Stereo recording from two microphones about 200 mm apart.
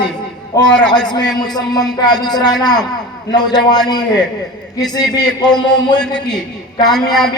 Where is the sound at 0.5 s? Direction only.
20° left (ahead or behind).